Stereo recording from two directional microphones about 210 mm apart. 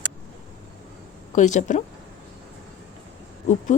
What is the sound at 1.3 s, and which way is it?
Speech, 35° left (ahead or behind).